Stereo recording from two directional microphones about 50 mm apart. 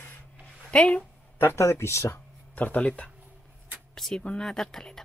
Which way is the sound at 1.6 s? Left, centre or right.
Left.